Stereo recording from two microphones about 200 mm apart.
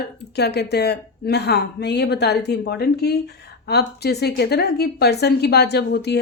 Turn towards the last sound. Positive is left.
turn(degrees=55)  # may be behind; listen again after turning